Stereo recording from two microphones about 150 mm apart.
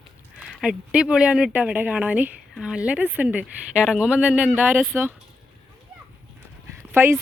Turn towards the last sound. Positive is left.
turn(degrees=-15)  # may be behind; listen again after turning